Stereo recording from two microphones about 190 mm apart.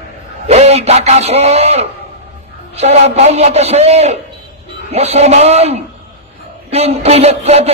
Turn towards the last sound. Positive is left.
turn(degrees=-35)  # may be behind; listen again after turning